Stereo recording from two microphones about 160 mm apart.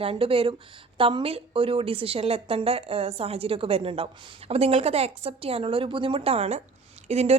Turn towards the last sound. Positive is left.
turn(degrees=-40)  # may be behind; listen again after turning